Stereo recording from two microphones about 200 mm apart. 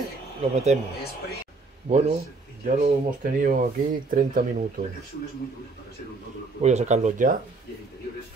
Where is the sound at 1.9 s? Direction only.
35° right (ahead or behind).